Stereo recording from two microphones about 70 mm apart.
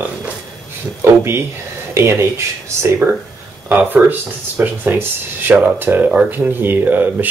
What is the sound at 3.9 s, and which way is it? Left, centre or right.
Speech, right.